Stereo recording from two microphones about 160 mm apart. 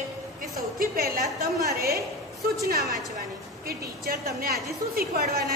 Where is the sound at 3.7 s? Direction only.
70° right (ahead or behind).